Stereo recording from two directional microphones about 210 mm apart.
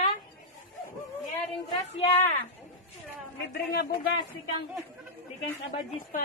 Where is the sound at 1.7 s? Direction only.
30° left (ahead or behind).